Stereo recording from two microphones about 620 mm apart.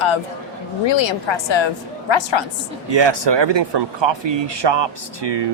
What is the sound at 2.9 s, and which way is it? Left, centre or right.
Speech, right.